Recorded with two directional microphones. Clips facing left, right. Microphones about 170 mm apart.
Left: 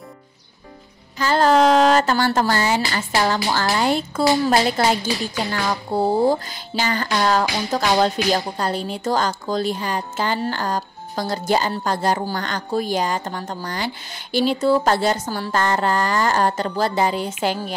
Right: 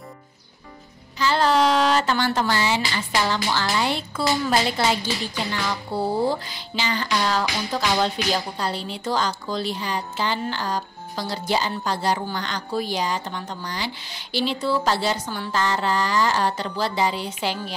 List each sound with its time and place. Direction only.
1.1 s speech: 45° left (ahead or behind)